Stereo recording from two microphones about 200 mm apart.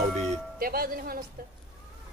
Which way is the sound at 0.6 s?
45° right (ahead or behind).